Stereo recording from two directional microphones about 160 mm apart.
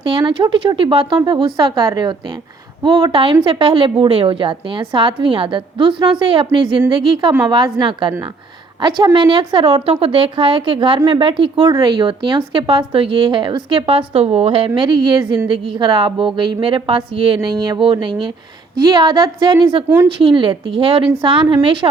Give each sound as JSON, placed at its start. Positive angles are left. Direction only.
{"t": 0.0, "sound": "a woman's voice", "side_deg": -30}